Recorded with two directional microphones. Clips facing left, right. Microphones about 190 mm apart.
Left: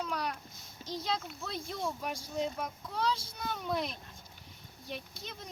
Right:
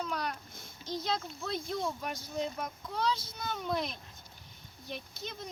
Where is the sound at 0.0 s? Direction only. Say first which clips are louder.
Even; centre (ahead or behind).